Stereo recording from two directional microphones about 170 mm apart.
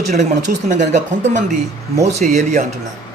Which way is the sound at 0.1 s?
45° right (ahead or behind).